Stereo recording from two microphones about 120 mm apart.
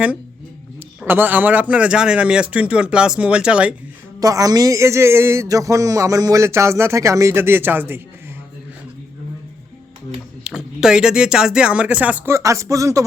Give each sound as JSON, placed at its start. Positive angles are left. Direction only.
{"t": 0.8, "sound": "a man's voice", "side_deg": -15}
{"t": 4.2, "sound": "a man's voice", "side_deg": -30}
{"t": 10.4, "sound": "a man's voice", "side_deg": -5}
{"t": 12.3, "sound": "a man's voice", "side_deg": -25}